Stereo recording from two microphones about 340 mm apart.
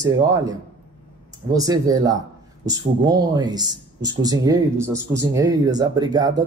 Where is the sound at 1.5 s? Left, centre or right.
Centre.